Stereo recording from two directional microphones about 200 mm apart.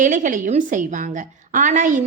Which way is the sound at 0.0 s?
40° right (ahead or behind).